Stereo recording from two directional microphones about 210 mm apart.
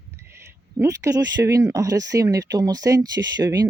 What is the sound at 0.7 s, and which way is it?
Speech, 15° right (ahead or behind).